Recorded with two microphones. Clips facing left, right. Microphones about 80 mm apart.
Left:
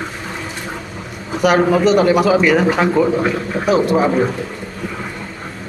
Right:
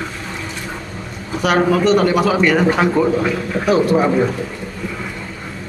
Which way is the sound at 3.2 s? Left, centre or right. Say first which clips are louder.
Left 1 dB; left.